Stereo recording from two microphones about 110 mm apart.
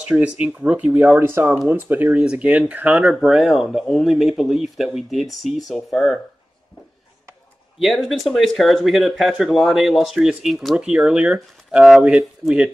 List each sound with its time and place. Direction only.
0.0 s speech: 10° right (ahead or behind)
1.2 s speech: 25° right (ahead or behind); by 6.1 s centre (ahead or behind)
7.8 s speech: centre (ahead or behind)